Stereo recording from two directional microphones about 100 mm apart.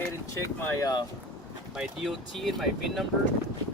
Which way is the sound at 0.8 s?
40° left (ahead or behind).